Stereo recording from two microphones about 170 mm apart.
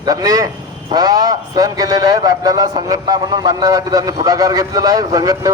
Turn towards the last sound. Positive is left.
turn(degrees=-20)  # may be behind; listen again after turning